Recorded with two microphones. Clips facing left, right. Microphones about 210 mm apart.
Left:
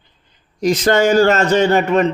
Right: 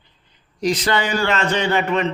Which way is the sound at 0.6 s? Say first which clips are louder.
Left 6 dB; 45° left (ahead or behind).